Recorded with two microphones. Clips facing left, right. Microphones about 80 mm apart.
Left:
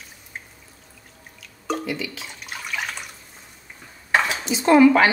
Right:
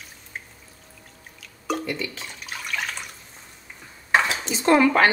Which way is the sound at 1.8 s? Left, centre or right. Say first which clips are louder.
Left 1 dB; right.